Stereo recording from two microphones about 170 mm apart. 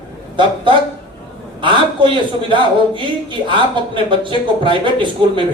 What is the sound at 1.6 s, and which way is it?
A man's voice, 30° right (ahead or behind).